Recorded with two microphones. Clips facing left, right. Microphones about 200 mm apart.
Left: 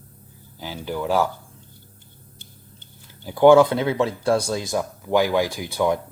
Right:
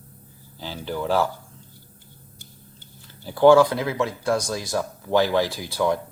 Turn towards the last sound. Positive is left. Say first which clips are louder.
# left 1 dB
turn(degrees=20)  # may be behind; listen again after turning